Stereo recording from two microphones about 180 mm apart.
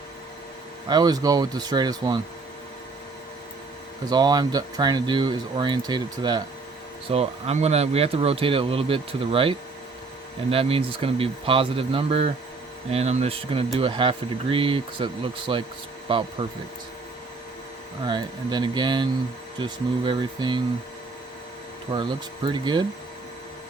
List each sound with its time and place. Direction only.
0.9 s speech: 20° right (ahead or behind)
4.0 s speech: 20° right (ahead or behind)
7.1 s speech: 35° right (ahead or behind)
18.1 s speech: 25° right (ahead or behind)
21.9 s speech: 25° right (ahead or behind)